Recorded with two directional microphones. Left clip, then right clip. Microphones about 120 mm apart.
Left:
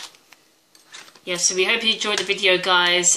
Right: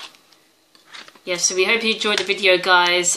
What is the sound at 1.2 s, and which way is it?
Speech, 15° right (ahead or behind).